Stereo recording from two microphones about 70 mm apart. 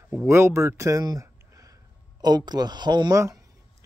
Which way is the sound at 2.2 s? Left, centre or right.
Right.